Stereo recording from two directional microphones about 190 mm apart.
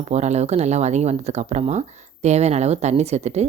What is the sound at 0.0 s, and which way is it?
Speech, 35° right (ahead or behind).